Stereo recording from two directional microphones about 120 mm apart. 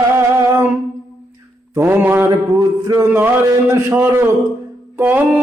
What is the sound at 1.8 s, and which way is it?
A man's voice, 15° right (ahead or behind).